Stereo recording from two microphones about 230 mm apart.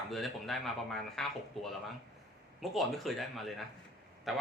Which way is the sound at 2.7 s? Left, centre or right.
Centre.